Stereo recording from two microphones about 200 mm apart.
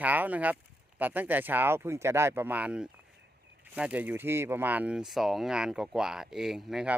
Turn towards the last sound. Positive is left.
turn(degrees=-5)  # may be behind; listen again after turning